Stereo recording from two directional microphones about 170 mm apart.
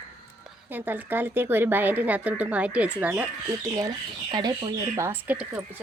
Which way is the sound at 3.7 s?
25° right (ahead or behind).